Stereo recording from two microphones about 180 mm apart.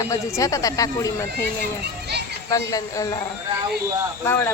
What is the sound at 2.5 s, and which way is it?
Speech, 20° left (ahead or behind).